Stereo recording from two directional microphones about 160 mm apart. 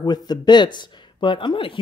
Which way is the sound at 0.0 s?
25° left (ahead or behind).